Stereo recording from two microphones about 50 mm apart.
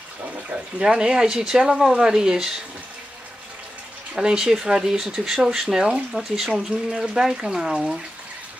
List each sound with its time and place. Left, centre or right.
0.5 s speech: centre
4.1 s speech: centre